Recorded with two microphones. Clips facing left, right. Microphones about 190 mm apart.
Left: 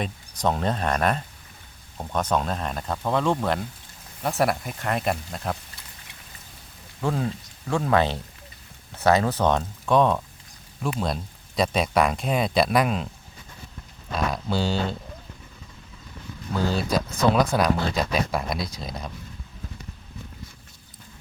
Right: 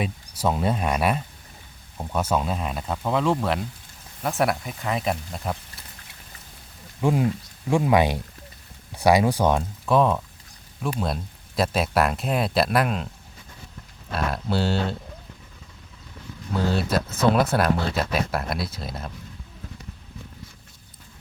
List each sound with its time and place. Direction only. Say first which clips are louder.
0.0 s speech: right 1 dB; 5° right (ahead or behind)
7.0 s speech: right 4 dB; 15° right (ahead or behind)
14.1 s speech: even; 5° right (ahead or behind)
16.6 s speech: right 1 dB; 5° right (ahead or behind)